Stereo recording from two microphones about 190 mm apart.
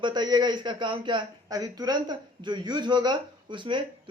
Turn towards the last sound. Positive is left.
turn(degrees=-25)  # may be behind; listen again after turning